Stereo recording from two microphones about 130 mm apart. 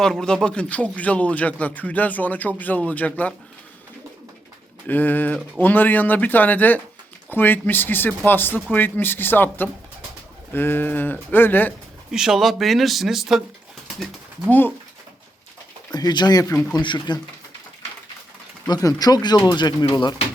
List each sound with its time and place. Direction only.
0.0 s speech: 5° left (ahead or behind)
4.9 s speech: 15° left (ahead or behind)
12.1 s speech: 5° right (ahead or behind)
13.8 s a sound: 5° right (ahead or behind)
16.0 s speech: 35° left (ahead or behind)
18.7 s speech: 30° left (ahead or behind)